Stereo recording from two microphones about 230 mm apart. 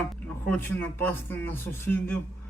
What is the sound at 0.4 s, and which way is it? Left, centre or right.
Speech, centre.